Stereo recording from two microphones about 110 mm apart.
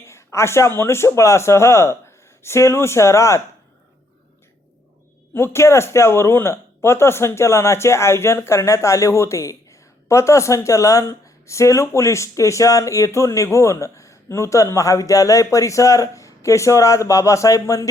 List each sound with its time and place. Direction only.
0.0 s a sound: 25° left (ahead or behind)
0.8 s speech: 25° left (ahead or behind)
5.3 s speech: 20° left (ahead or behind)